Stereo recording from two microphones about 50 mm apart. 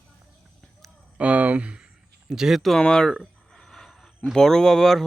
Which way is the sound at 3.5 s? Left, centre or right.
Centre.